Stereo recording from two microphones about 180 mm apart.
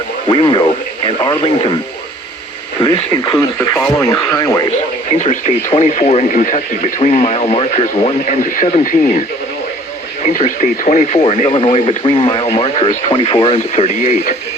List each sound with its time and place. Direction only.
0.3 s speech: 25° left (ahead or behind)
2.8 s speech: 20° left (ahead or behind)
5.1 s speech: 40° left (ahead or behind)
10.2 s speech: 40° left (ahead or behind)